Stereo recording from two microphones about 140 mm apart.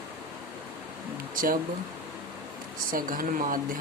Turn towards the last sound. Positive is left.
turn(degrees=-80)